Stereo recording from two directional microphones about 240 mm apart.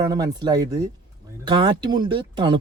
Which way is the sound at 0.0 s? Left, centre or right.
Centre.